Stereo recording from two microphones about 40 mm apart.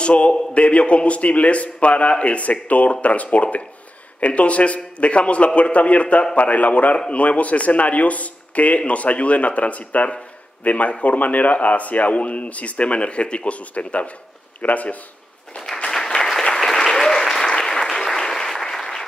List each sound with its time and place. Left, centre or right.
0.0 s a man's voice: left
16.2 s applause: centre